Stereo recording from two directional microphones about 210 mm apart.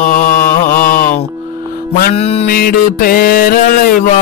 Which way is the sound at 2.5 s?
45° left (ahead or behind).